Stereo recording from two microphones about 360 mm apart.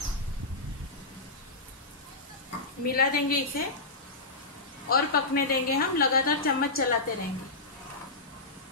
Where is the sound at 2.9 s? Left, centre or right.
Left.